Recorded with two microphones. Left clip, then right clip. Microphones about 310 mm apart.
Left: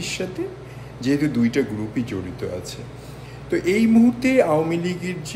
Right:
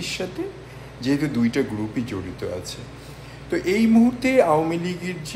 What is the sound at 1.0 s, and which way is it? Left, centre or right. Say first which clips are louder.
Speech: left 2 dB; centre.